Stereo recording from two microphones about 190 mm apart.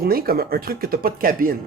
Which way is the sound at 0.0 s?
55° right (ahead or behind).